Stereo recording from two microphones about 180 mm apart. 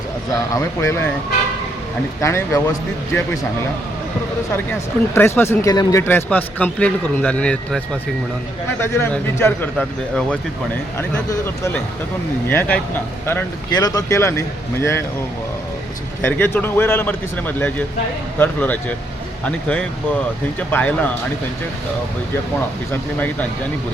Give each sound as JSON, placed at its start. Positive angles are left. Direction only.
{"t": 0.3, "sound": "speech", "side_deg": 15}
{"t": 2.2, "sound": "speech", "side_deg": 15}
{"t": 5.1, "sound": "speech", "side_deg": 10}
{"t": 8.8, "sound": "speech", "side_deg": 15}
{"t": 16.2, "sound": "speech", "side_deg": 10}